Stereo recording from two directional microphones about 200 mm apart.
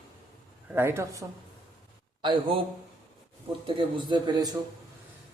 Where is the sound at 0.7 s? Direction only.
10° right (ahead or behind).